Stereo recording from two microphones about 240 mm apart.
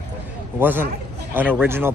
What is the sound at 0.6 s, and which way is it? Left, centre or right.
A man's voice, centre.